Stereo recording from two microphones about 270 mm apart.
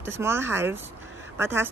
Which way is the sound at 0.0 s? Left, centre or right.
Centre.